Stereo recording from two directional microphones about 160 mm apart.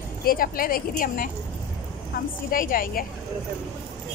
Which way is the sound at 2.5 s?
65° left (ahead or behind).